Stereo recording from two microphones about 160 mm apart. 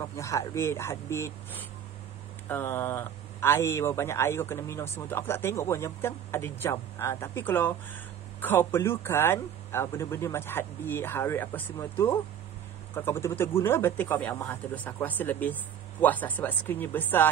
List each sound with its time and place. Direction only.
0.0 s speech: 20° left (ahead or behind)